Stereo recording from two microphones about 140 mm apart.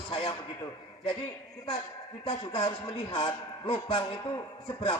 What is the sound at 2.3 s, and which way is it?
A man's voice, 35° left (ahead or behind).